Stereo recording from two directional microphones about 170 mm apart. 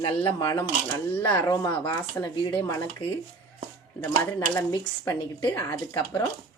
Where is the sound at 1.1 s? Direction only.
10° left (ahead or behind).